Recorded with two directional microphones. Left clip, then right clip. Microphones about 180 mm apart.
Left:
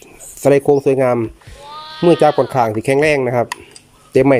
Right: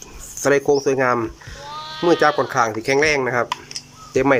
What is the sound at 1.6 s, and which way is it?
Sheep, centre (ahead or behind).